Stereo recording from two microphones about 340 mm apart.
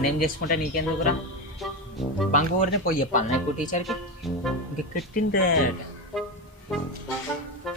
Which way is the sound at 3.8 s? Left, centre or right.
Centre.